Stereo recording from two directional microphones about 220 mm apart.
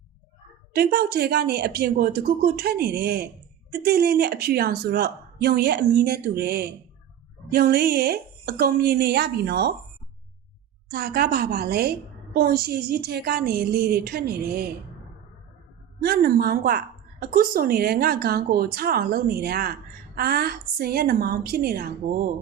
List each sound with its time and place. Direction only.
0.7 s a woman's voice: 45° right (ahead or behind)
10.9 s a woman's voice: 45° right (ahead or behind)
16.0 s a woman's voice: 45° right (ahead or behind)